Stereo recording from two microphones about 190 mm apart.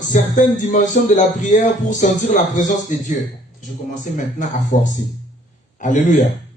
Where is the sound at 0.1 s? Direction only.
40° left (ahead or behind).